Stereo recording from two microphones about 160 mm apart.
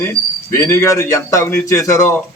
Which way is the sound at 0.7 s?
20° left (ahead or behind).